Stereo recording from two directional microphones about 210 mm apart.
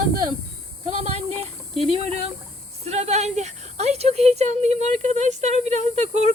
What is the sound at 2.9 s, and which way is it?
A woman's voice, 30° right (ahead or behind).